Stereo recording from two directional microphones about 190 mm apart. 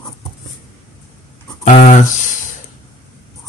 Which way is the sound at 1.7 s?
40° left (ahead or behind).